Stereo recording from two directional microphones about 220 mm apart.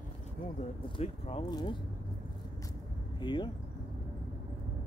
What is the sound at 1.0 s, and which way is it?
Speech, 25° left (ahead or behind).